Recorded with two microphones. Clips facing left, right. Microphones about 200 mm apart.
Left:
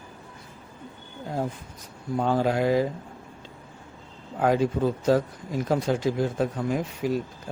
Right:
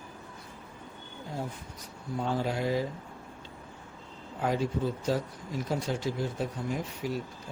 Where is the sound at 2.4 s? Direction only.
90° left.